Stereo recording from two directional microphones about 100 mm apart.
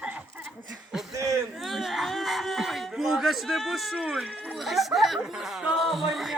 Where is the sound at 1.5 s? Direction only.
Centre (ahead or behind).